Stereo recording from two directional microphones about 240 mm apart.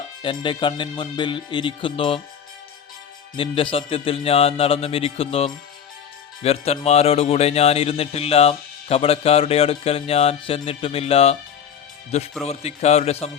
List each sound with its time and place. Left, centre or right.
0.2 s speech: left
3.3 s speech: left